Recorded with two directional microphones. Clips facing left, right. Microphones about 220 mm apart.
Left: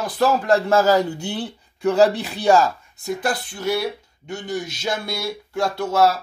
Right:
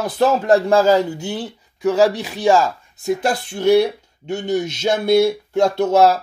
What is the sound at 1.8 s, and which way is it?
Speech, 10° right (ahead or behind).